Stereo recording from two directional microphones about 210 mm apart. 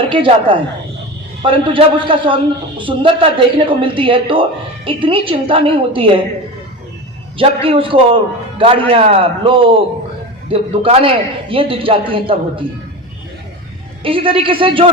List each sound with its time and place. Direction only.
0.0 s a man's voice: 25° right (ahead or behind)
7.3 s a man's voice: 25° right (ahead or behind)
14.0 s a man's voice: 25° right (ahead or behind)